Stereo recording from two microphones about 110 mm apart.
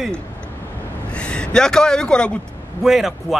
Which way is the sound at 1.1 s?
10° left (ahead or behind).